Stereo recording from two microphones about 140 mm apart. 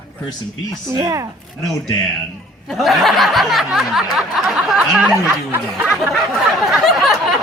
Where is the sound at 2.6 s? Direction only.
Centre (ahead or behind).